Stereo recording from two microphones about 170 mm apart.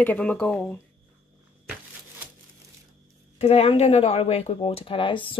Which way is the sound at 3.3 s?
35° left (ahead or behind).